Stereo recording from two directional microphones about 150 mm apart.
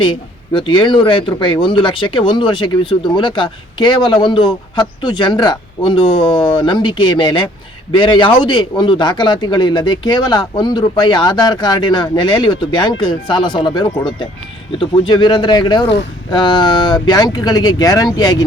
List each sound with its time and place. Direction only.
0.0 s speech: 35° left (ahead or behind)